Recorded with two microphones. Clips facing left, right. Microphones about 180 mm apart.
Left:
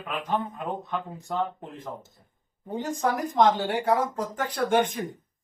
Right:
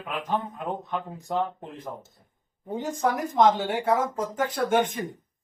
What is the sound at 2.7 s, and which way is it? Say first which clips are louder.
Speech: right 1 dB; centre (ahead or behind).